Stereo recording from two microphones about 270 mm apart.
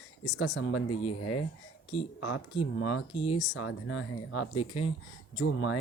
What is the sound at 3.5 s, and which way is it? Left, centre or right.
Speech, left.